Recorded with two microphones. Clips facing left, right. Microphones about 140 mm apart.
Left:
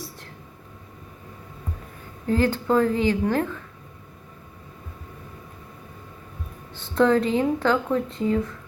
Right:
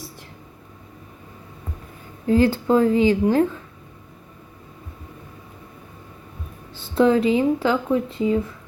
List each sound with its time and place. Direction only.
2.2 s speech: 15° right (ahead or behind)
7.0 s speech: 10° right (ahead or behind)